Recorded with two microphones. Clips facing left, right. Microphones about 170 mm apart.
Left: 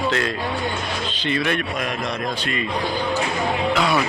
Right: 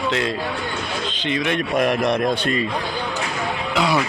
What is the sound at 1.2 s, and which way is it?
Speech, 15° right (ahead or behind).